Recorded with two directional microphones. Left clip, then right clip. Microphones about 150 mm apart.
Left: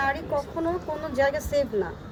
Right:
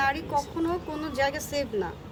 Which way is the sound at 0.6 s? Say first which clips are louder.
Left 2 dB; 25° right (ahead or behind).